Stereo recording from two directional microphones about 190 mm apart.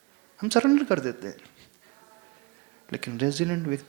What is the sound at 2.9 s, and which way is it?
Speech, 10° right (ahead or behind).